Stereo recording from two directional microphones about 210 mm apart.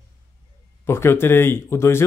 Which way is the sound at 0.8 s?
10° left (ahead or behind).